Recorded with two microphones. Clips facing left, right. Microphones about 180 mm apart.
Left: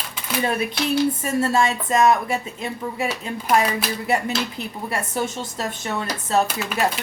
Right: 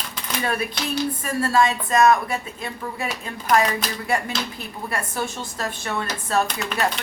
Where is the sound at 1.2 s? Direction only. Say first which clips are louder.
Even; 25° left (ahead or behind).